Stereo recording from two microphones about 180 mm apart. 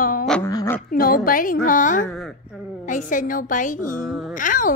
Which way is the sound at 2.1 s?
Centre (ahead or behind).